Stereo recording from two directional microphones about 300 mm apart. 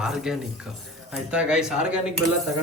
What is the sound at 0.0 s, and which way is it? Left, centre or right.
Speech, centre.